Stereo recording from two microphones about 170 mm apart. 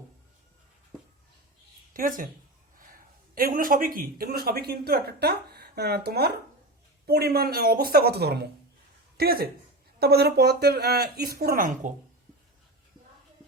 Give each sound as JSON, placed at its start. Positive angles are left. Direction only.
{"t": 1.9, "sound": "a woman's voice", "side_deg": -55}